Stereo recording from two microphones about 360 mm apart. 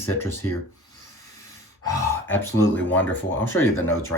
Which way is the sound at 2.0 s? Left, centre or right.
Centre.